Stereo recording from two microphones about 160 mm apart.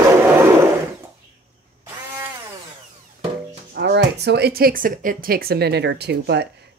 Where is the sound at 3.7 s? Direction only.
90° right.